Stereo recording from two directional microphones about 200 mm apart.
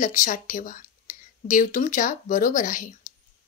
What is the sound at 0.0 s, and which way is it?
Speech, 40° left (ahead or behind).